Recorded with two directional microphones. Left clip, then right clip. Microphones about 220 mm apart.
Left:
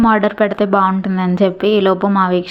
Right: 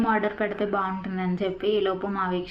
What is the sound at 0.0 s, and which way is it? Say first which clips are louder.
A woman's voice: left 11 dB; 45° left (ahead or behind).